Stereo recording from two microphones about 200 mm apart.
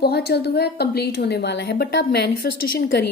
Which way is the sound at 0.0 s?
50° left (ahead or behind).